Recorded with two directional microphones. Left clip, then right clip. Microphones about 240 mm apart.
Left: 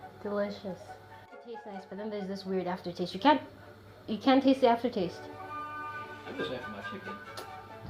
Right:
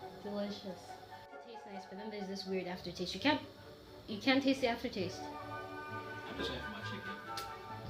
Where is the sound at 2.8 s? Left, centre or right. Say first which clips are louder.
Left 10 dB; left.